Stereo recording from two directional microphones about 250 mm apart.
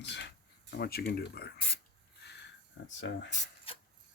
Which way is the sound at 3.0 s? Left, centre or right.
Left.